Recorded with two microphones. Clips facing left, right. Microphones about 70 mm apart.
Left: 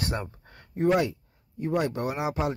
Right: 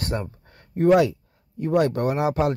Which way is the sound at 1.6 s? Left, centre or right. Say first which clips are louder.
Right 6 dB; right.